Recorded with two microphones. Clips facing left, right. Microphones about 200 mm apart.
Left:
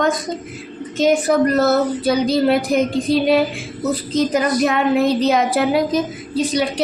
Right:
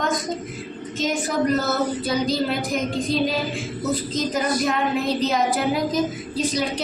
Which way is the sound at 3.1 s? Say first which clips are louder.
Left 5 dB; 65° left (ahead or behind).